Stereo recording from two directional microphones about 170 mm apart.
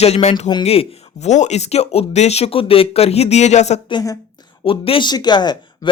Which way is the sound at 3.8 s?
25° left (ahead or behind).